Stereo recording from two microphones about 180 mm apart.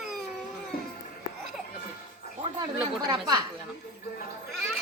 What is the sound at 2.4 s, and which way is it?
Speech, 25° right (ahead or behind).